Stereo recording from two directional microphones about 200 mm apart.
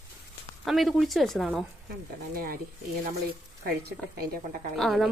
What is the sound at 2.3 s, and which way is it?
Speech, 45° right (ahead or behind).